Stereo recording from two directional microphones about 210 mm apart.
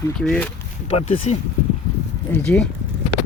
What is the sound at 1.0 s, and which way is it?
Speech, 30° left (ahead or behind).